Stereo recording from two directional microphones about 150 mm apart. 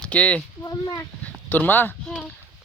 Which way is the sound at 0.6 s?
25° left (ahead or behind).